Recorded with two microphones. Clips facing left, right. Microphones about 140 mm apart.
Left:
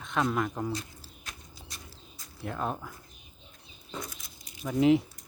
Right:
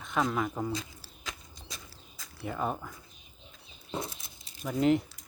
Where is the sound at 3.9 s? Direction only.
25° right (ahead or behind).